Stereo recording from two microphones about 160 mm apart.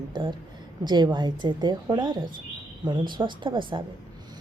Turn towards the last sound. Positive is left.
turn(degrees=-30)  # may be behind; listen again after turning